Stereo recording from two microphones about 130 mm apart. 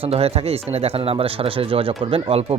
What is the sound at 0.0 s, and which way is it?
Speech, 50° right (ahead or behind).